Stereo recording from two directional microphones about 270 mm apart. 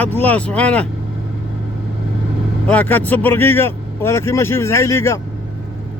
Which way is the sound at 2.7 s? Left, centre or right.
Centre.